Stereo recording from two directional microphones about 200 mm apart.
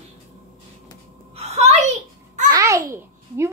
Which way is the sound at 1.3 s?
30° right (ahead or behind).